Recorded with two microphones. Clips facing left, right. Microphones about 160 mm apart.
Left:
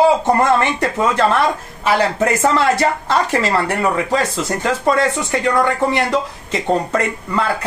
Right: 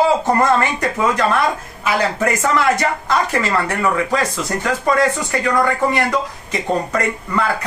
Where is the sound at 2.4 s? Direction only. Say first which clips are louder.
Left 2 dB; 30° left (ahead or behind).